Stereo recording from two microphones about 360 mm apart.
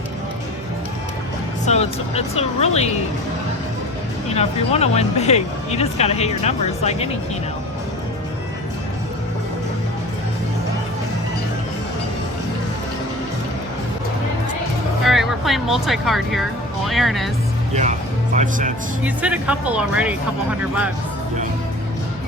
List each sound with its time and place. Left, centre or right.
1.6 s speech: centre
4.4 s speech: centre
15.0 s speech: centre
18.3 s speech: right
19.0 s speech: centre